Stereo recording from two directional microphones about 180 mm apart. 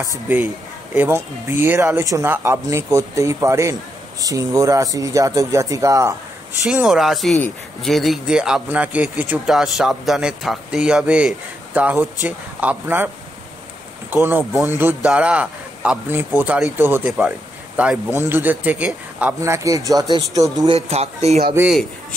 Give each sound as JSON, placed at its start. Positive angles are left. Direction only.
{"t": 0.9, "sound": "a man's voice", "side_deg": -10}
{"t": 6.6, "sound": "speech", "side_deg": -5}
{"t": 14.1, "sound": "a man's voice", "side_deg": -10}